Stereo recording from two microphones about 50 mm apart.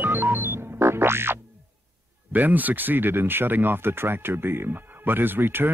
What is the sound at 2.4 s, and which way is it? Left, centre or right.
Speech, right.